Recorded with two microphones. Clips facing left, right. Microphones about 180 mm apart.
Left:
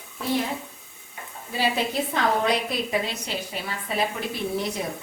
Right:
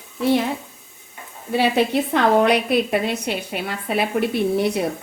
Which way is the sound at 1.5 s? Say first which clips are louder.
Right 7 dB; 65° right (ahead or behind).